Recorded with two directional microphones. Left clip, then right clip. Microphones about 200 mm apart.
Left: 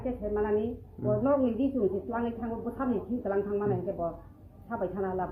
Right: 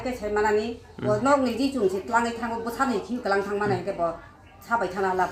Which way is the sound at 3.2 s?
5° right (ahead or behind).